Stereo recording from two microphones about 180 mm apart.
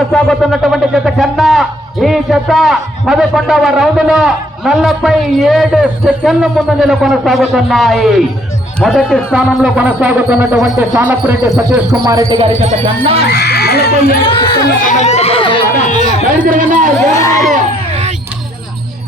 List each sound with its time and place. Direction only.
0.1 s speech: centre (ahead or behind)
9.3 s music: 5° right (ahead or behind)
12.0 s speech: 20° right (ahead or behind)
12.4 s speech: 30° right (ahead or behind)
13.2 s speech: 65° left (ahead or behind)
14.3 s speech: 25° left (ahead or behind)
14.8 s a sound: 45° left (ahead or behind)
16.4 s speech: 45° right (ahead or behind)
17.2 s a sound: 15° left (ahead or behind)
17.5 s a sound: 40° right (ahead or behind)